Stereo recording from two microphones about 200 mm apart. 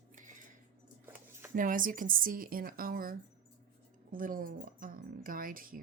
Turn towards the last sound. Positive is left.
turn(degrees=-45)  # may be behind; listen again after turning